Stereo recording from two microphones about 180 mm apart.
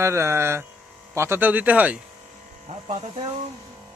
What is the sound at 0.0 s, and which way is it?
Speech, 15° right (ahead or behind).